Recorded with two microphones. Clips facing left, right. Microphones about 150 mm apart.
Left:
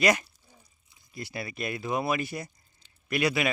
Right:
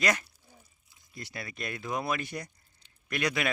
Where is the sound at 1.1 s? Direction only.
10° left (ahead or behind).